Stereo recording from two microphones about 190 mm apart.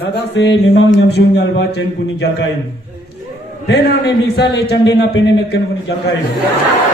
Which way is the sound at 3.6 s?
60° left (ahead or behind).